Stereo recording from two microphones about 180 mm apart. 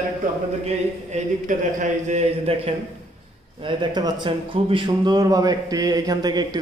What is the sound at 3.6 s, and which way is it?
A man's voice, 25° right (ahead or behind).